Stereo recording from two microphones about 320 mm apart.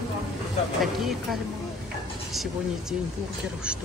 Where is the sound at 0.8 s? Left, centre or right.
Centre.